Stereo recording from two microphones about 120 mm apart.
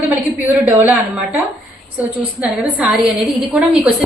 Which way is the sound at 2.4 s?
10° right (ahead or behind).